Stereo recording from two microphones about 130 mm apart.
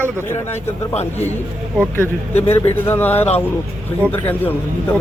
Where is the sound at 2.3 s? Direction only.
15° left (ahead or behind).